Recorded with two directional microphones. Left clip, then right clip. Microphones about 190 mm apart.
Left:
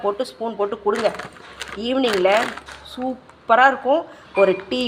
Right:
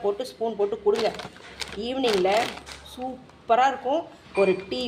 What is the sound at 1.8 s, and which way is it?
Speech, 10° left (ahead or behind).